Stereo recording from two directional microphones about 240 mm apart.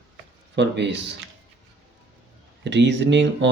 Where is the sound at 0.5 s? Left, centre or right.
Right.